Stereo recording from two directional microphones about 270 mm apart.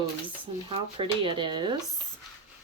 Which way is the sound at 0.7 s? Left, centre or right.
Centre.